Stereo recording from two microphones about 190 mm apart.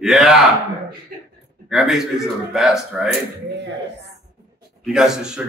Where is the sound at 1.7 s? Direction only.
Centre (ahead or behind).